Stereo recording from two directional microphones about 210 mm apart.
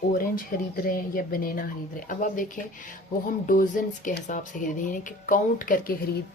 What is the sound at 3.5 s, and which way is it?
Speech, 40° left (ahead or behind).